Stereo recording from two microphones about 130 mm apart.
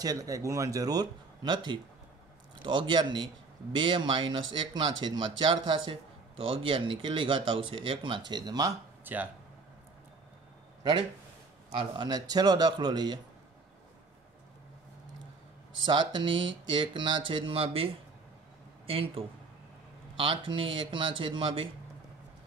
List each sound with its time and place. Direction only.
0.0 s speech: 30° right (ahead or behind)
9.0 s speech: 15° right (ahead or behind)
10.8 s speech: 40° right (ahead or behind)
15.8 s speech: 35° right (ahead or behind)